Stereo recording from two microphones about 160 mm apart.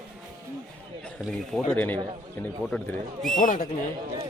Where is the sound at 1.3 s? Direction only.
5° left (ahead or behind).